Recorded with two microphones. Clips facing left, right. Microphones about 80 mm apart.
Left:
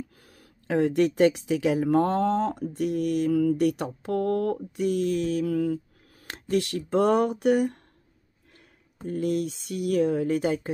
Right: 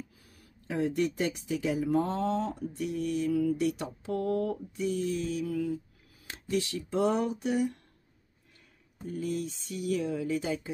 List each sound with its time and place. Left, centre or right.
0.4 s speech: left
8.9 s speech: left